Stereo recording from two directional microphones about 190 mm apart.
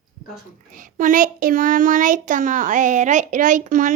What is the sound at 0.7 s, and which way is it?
Child singing, 45° right (ahead or behind).